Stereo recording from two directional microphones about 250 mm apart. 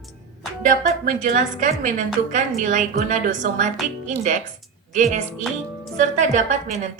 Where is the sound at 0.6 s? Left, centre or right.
Right.